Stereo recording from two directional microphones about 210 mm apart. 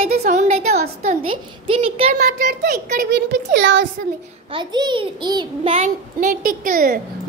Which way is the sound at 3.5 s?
60° right (ahead or behind).